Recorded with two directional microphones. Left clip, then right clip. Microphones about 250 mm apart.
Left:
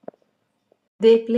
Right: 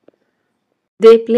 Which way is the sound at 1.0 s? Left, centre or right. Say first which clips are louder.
Right 8 dB; right.